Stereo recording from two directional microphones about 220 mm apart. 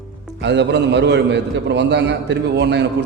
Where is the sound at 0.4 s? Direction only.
50° right (ahead or behind).